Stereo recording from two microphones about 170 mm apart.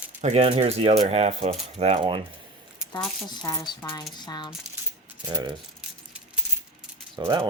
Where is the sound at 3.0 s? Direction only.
5° left (ahead or behind).